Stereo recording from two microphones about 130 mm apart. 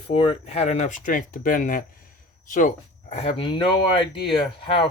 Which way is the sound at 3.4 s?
40° left (ahead or behind).